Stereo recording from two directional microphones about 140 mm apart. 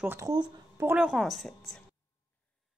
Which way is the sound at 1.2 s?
Centre (ahead or behind).